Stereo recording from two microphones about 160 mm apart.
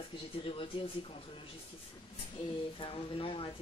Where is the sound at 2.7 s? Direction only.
35° left (ahead or behind).